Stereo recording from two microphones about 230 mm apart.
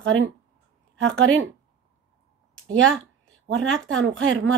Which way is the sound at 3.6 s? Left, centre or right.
Right.